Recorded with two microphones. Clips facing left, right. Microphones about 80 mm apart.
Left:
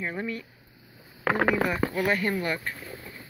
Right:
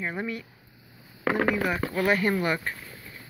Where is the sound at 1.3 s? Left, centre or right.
Left.